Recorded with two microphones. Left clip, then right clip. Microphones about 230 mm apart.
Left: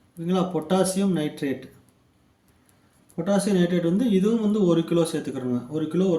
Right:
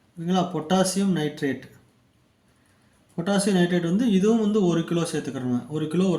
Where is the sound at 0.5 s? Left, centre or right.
Centre.